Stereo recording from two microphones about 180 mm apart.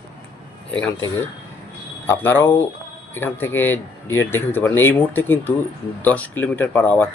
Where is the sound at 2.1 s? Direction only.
10° left (ahead or behind).